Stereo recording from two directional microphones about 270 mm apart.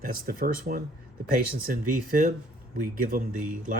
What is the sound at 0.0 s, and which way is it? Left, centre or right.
Speech, right.